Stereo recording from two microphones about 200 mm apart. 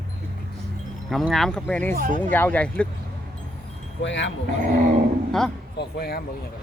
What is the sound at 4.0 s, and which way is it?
Speech, 65° left (ahead or behind).